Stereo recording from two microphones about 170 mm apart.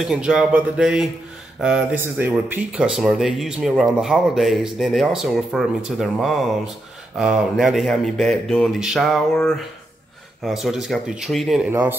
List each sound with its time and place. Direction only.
0.0 s speech: 5° right (ahead or behind)
11.7 s speech: 10° right (ahead or behind)